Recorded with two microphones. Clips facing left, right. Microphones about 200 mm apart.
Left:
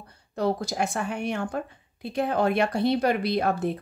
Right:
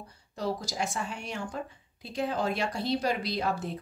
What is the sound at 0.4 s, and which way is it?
Speech, 60° left (ahead or behind).